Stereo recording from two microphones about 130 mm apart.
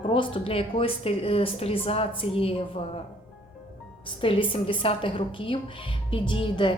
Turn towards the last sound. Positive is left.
turn(degrees=40)  # may be behind; listen again after turning